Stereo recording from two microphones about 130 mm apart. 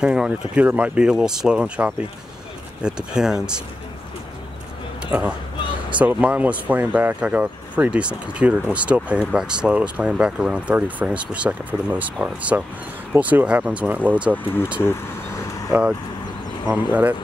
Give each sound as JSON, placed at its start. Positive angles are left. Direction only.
{"t": 0.0, "sound": "speech", "side_deg": -5}
{"t": 3.1, "sound": "speech", "side_deg": -5}
{"t": 5.0, "sound": "speech", "side_deg": -10}
{"t": 14.3, "sound": "speech", "side_deg": 15}
{"t": 16.6, "sound": "speech", "side_deg": -10}